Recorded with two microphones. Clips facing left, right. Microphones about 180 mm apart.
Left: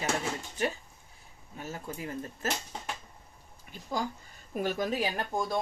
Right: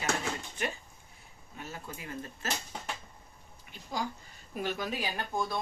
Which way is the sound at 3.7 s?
50° left (ahead or behind).